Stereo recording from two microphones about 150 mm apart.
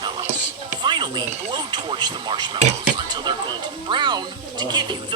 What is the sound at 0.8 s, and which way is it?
Speech, 30° right (ahead or behind).